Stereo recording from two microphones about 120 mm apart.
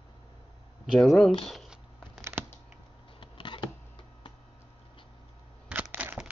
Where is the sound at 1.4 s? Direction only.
Centre (ahead or behind).